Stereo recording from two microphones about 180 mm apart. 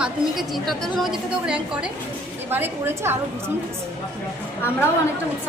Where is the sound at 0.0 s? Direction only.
Centre (ahead or behind).